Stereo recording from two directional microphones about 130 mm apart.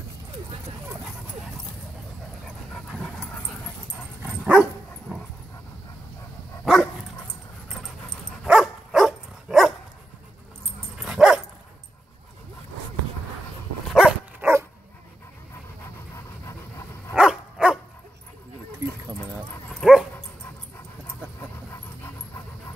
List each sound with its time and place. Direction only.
2.4 s dog: 5° left (ahead or behind)
3.8 s dog: 10° right (ahead or behind)
6.6 s dog: centre (ahead or behind)
11.0 s dog: 5° right (ahead or behind)
13.8 s dog: 5° right (ahead or behind)
14.4 s dog: 15° right (ahead or behind)
17.1 s dog: 5° right (ahead or behind)
18.8 s dog: 20° right (ahead or behind)
19.7 s dog: 5° right (ahead or behind)